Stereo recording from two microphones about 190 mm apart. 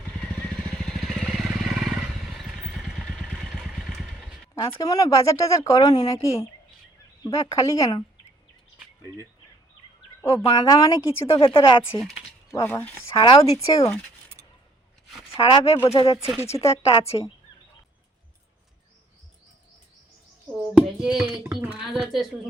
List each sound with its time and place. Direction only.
0.2 s vehicle: 5° left (ahead or behind)
4.5 s speech: 15° left (ahead or behind)
7.3 s speech: 15° left (ahead or behind)
10.2 s speech: 15° left (ahead or behind)
11.3 s speech: 30° left (ahead or behind)
11.9 s speech: centre (ahead or behind)
12.5 s speech: 10° left (ahead or behind)
13.1 s speech: 25° left (ahead or behind)
15.4 s a woman's voice: 30° left (ahead or behind)
20.7 s a sound: 5° right (ahead or behind)